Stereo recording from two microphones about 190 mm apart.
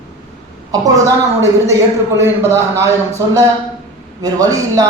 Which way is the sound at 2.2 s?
15° right (ahead or behind).